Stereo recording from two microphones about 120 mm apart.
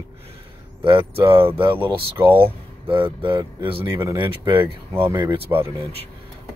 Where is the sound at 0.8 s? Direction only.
45° right (ahead or behind).